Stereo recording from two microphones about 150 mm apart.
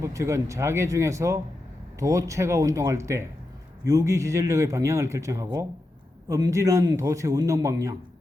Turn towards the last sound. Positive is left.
turn(degrees=-20)  # may be behind; listen again after turning